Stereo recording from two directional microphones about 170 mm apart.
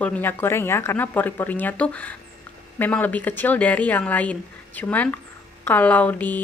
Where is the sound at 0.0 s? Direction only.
10° left (ahead or behind).